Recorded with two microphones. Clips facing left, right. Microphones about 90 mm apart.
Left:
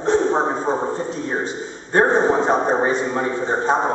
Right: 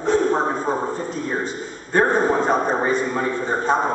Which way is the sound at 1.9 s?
25° left (ahead or behind).